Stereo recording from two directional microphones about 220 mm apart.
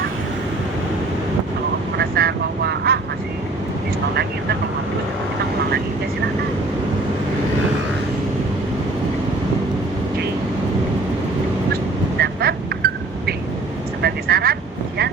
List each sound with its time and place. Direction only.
2.0 s vehicle: 45° right (ahead or behind)
12.2 s duck: 45° right (ahead or behind)
14.0 s vehicle: 45° right (ahead or behind)